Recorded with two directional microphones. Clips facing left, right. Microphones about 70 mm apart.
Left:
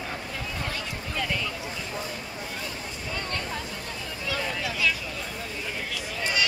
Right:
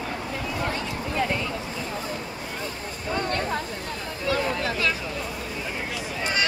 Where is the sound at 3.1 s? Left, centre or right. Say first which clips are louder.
Right 7 dB; right.